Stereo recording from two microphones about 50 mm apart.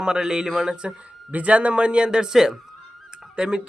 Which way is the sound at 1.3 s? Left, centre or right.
Right.